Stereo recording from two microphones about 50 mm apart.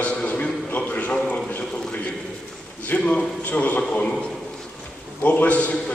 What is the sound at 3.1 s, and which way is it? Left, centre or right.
A man's voice, left.